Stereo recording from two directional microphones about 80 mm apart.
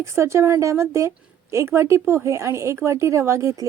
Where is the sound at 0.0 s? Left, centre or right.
Right.